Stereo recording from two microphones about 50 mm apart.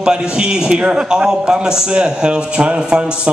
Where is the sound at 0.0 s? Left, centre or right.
Centre.